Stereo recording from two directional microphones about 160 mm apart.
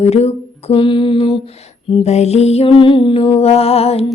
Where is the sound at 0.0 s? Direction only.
40° left (ahead or behind).